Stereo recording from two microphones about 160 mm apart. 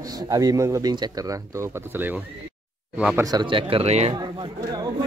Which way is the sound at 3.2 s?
25° right (ahead or behind).